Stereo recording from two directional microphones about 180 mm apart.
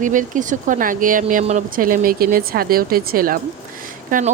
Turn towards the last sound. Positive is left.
turn(degrees=-45)  # may be behind; listen again after turning